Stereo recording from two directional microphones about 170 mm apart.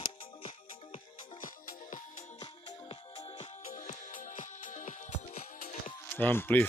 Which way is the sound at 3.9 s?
45° left (ahead or behind).